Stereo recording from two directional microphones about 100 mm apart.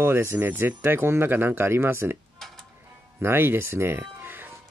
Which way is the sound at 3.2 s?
20° right (ahead or behind).